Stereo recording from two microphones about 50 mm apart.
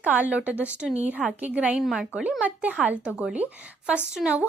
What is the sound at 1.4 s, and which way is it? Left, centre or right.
Speech, right.